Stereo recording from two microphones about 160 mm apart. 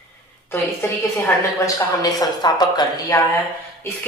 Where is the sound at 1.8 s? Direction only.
25° left (ahead or behind).